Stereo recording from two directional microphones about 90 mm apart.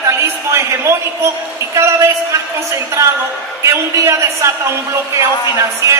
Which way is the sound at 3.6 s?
35° right (ahead or behind).